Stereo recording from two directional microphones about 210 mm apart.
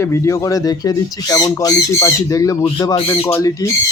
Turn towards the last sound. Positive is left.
turn(degrees=15)  # may be behind; listen again after turning